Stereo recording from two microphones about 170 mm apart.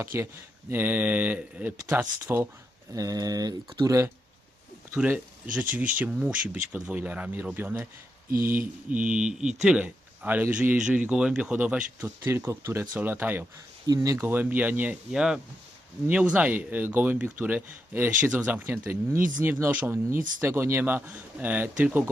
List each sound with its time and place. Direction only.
0.0 s speech: 15° right (ahead or behind)
4.9 s speech: 10° right (ahead or behind)
8.9 s speech: 5° right (ahead or behind)